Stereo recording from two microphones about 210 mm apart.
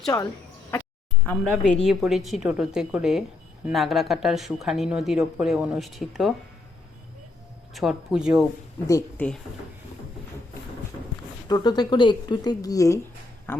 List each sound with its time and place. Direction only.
0.1 s speech: 15° left (ahead or behind)
1.3 s speech: 5° left (ahead or behind)
7.7 s speech: centre (ahead or behind)
8.9 s speech: 10° left (ahead or behind)
11.4 s speech: 20° left (ahead or behind)
13.5 s a sound: 10° left (ahead or behind)